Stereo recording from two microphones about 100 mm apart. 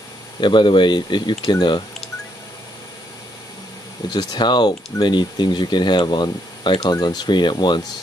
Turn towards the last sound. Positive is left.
turn(degrees=50)  # may be behind; listen again after turning